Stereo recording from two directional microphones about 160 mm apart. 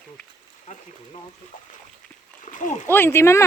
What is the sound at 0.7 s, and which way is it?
Speech, 50° left (ahead or behind).